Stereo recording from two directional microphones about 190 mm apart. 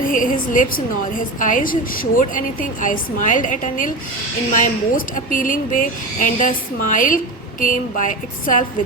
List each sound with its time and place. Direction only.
0.0 s a woman's voice: 45° left (ahead or behind)